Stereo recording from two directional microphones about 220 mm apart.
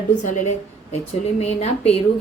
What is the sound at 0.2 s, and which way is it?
Speech, 35° left (ahead or behind).